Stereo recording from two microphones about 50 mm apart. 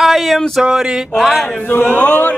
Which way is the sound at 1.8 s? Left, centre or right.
Left.